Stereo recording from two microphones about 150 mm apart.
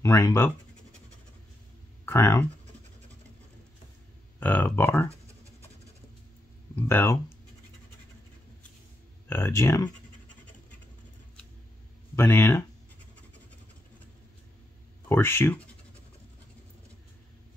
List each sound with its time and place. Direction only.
0.0 s speech: 20° left (ahead or behind)
2.0 s speech: 20° left (ahead or behind)
4.4 s speech: 10° left (ahead or behind)
6.7 s speech: 15° left (ahead or behind)
9.3 s speech: 20° left (ahead or behind)
12.2 s speech: 15° left (ahead or behind)
15.0 s speech: 15° left (ahead or behind)